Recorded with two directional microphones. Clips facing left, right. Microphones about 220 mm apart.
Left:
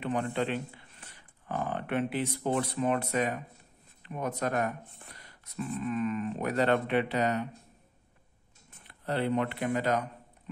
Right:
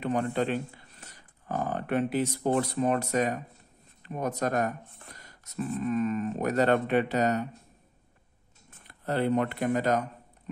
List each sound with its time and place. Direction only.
0.0 s speech: 40° right (ahead or behind)
8.8 s speech: 45° right (ahead or behind)